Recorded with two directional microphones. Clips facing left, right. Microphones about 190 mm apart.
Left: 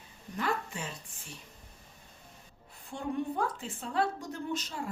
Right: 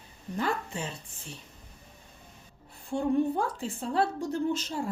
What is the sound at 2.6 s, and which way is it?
A woman's voice, 30° right (ahead or behind).